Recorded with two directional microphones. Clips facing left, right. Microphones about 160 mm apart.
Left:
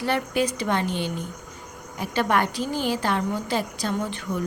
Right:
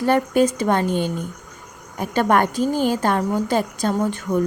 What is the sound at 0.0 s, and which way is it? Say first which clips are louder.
Speech: right 7 dB; 45° right (ahead or behind).